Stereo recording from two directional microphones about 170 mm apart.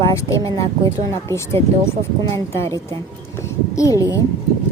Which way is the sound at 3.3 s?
20° left (ahead or behind).